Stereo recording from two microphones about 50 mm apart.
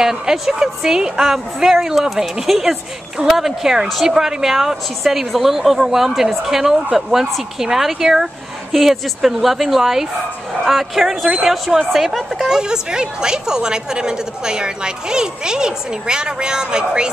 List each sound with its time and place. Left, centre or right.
0.0 s a woman's voice: centre
12.4 s a woman's voice: centre